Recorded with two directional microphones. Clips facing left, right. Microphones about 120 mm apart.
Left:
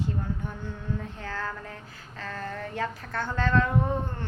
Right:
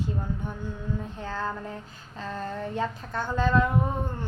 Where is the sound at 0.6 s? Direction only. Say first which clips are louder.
Right 1 dB; 15° right (ahead or behind).